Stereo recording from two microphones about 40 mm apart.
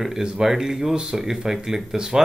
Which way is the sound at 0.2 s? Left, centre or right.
Centre.